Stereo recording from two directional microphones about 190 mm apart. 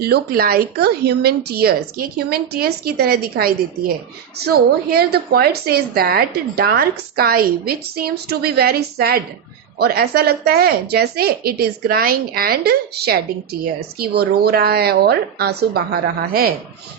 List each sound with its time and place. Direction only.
0.0 s a woman's voice: 55° right (ahead or behind)